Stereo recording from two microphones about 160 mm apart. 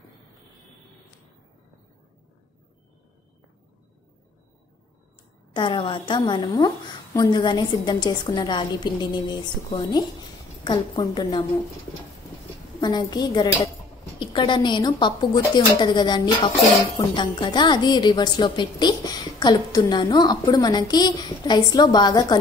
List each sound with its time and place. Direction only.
5.5 s a woman's voice: 30° left (ahead or behind)
12.8 s a woman's voice: 25° left (ahead or behind)